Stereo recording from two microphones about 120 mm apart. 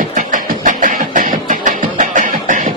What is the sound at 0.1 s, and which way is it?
Music, 90° right.